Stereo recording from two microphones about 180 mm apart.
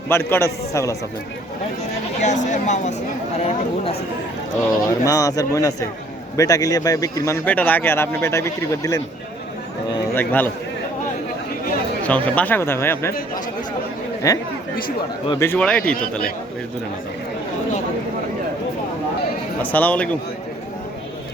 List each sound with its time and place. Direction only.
0.1 s speech: 15° left (ahead or behind)
2.2 s speech: 40° left (ahead or behind)
4.9 s speech: 20° left (ahead or behind)
10.2 s speech: 10° left (ahead or behind)
12.0 s speech: 10° left (ahead or behind)
14.3 s speech: 20° left (ahead or behind)
19.6 s speech: 10° left (ahead or behind)